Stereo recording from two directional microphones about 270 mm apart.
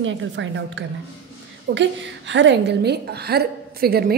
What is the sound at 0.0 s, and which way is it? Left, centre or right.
A woman's voice, right.